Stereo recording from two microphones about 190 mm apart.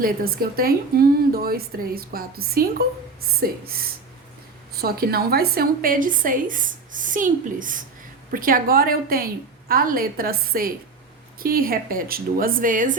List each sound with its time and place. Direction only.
0.0 s a woman's voice: 50° right (ahead or behind)